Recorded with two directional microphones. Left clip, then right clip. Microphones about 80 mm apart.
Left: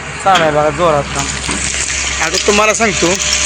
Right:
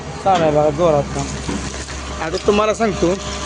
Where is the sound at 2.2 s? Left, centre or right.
Centre.